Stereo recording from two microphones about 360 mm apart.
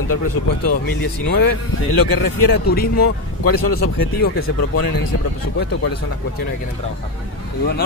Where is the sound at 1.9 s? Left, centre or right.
Left.